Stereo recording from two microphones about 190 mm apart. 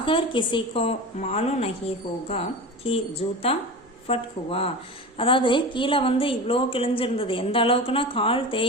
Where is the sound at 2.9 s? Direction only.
30° left (ahead or behind).